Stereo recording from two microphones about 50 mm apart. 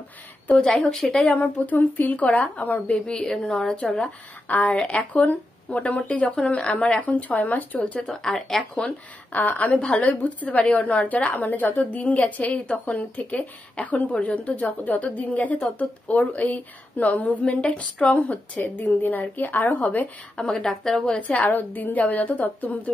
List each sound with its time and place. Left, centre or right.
0.9 s speech: centre
1.3 s a woman's voice: left
3.1 s speech: centre
4.5 s a woman's voice: left
8.1 s speech: centre
9.3 s a woman's voice: left
9.8 s speech: centre
10.0 s a woman's voice: left
18.6 s a woman's voice: left
20.3 s speech: centre
21.2 s a woman's voice: left